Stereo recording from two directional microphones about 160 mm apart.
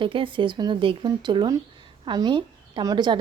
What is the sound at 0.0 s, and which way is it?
Speech, 35° right (ahead or behind).